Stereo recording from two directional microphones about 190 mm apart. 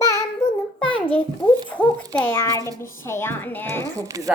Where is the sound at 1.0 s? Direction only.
30° left (ahead or behind).